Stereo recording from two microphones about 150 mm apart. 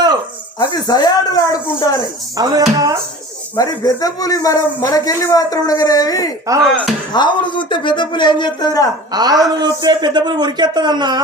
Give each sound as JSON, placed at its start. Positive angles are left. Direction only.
{"t": 0.6, "sound": "speech", "side_deg": 30}
{"t": 2.4, "sound": "a man's voice", "side_deg": -25}
{"t": 3.6, "sound": "speech", "side_deg": 25}
{"t": 6.5, "sound": "a man's voice", "side_deg": -20}
{"t": 7.1, "sound": "a man's voice", "side_deg": 30}
{"t": 9.1, "sound": "a man's voice", "side_deg": -25}